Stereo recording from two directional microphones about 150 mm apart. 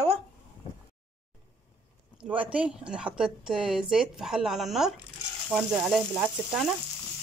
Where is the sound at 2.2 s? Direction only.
10° right (ahead or behind).